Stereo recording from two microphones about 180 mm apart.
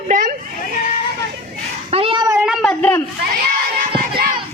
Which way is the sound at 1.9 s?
30° right (ahead or behind).